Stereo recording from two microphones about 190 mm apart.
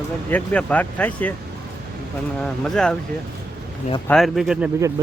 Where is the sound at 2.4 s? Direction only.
5° left (ahead or behind).